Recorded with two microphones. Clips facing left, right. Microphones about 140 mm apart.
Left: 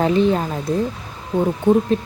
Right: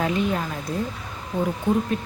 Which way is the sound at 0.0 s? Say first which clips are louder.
Left 7 dB; 30° left (ahead or behind).